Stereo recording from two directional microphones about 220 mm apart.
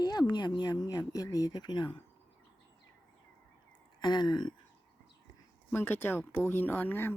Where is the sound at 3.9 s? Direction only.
20° left (ahead or behind).